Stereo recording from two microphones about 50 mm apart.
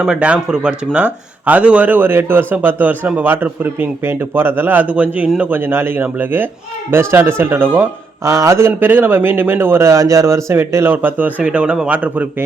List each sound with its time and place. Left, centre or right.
0.0 s a man's voice: right
0.9 s a man's voice: right
1.9 s speech: right
5.5 s speech: right
6.0 s speech: right
6.9 s speech: right
8.2 s a man's voice: right
8.8 s speech: right
10.8 s a man's voice: right